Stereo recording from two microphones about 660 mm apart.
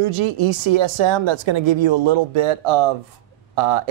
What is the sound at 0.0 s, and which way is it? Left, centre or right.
Speech, right.